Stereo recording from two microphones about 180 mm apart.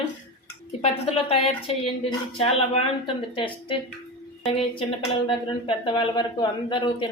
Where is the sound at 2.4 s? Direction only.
35° left (ahead or behind).